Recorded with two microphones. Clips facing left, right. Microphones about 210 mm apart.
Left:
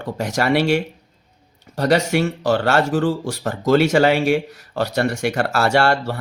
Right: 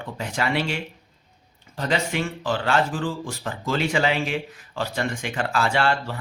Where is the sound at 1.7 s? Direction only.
40° left (ahead or behind).